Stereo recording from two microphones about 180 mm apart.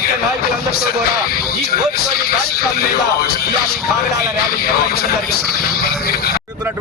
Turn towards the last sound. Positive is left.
turn(degrees=60)  # may be behind; listen again after turning